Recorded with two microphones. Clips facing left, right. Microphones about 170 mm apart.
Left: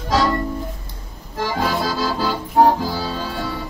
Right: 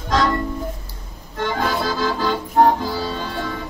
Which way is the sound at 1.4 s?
5° left (ahead or behind).